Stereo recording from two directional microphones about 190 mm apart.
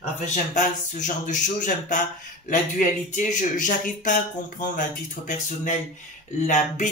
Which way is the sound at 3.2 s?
40° left (ahead or behind).